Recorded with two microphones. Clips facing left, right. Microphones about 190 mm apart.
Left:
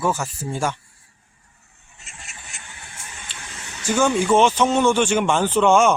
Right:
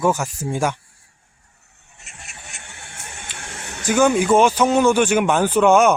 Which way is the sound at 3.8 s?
10° right (ahead or behind).